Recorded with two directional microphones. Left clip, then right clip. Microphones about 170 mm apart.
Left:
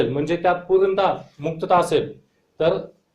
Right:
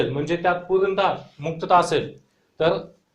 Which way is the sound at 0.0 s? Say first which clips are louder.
Left 2 dB; centre (ahead or behind).